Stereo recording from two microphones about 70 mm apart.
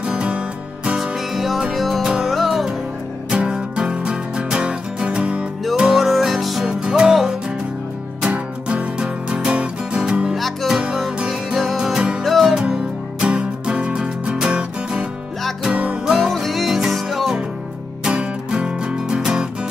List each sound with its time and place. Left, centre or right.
0.0 s music: centre
0.9 s music: centre
5.8 s music: centre
8.2 s music: centre
13.2 s music: centre
16.1 s music: centre
18.0 s music: centre